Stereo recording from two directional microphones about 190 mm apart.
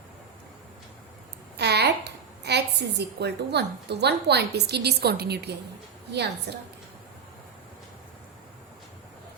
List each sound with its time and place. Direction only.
1.5 s a woman's voice: 60° right (ahead or behind)